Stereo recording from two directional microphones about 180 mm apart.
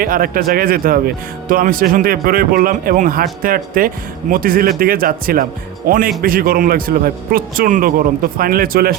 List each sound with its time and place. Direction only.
0.0 s speech: 50° right (ahead or behind)